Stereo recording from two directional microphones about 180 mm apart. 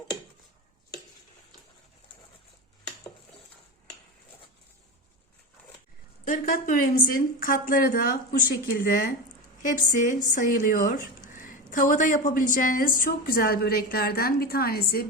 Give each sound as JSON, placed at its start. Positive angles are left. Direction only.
{"t": 6.2, "sound": "a woman's voice", "side_deg": 50}